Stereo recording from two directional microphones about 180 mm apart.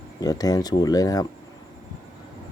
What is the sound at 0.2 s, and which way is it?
Speech, 20° left (ahead or behind).